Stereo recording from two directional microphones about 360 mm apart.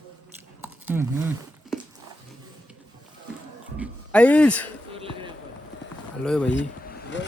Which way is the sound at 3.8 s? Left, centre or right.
Centre.